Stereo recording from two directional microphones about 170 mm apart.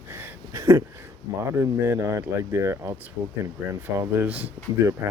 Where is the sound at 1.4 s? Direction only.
15° right (ahead or behind).